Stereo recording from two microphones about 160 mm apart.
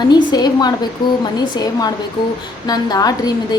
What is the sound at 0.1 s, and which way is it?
A woman's voice, 25° left (ahead or behind).